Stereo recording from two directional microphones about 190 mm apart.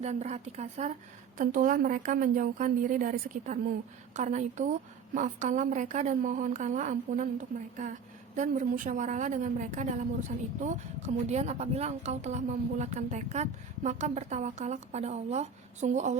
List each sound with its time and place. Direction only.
0.0 s a woman's voice: 35° right (ahead or behind)